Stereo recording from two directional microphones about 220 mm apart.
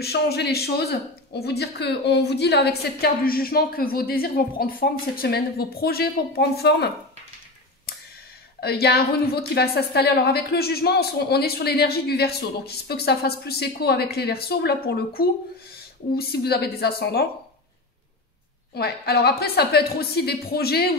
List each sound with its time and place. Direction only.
0.0 s speech: 45° left (ahead or behind)
8.5 s speech: 45° left (ahead or behind)
18.8 s speech: 45° left (ahead or behind)